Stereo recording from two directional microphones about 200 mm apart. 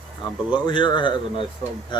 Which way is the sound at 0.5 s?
25° left (ahead or behind).